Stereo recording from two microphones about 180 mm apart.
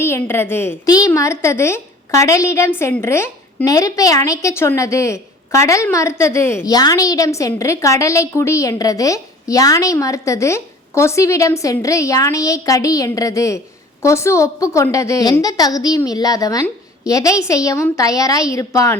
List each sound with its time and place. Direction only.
0.0 s a woman's voice: 15° left (ahead or behind)